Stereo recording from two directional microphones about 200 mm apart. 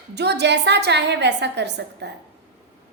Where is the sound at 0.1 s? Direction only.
55° right (ahead or behind).